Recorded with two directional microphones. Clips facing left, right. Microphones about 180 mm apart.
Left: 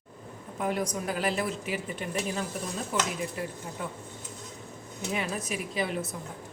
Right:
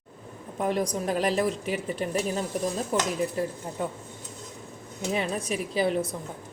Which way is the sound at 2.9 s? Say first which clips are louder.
Right 2 dB; 40° right (ahead or behind).